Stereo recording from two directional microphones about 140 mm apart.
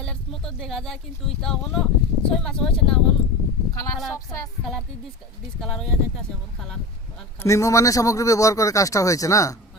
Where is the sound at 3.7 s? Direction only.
25° left (ahead or behind).